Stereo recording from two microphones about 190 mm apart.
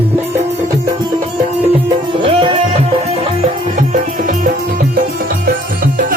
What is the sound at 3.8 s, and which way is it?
Music, 45° right (ahead or behind).